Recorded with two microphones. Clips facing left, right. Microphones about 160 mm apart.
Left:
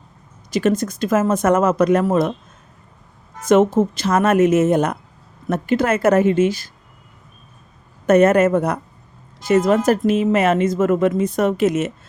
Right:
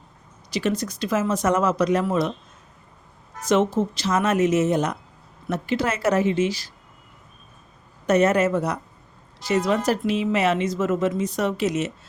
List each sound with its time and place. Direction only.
0.5 s speech: 50° left (ahead or behind)
3.4 s speech: 50° left (ahead or behind)
8.0 s speech: 50° left (ahead or behind)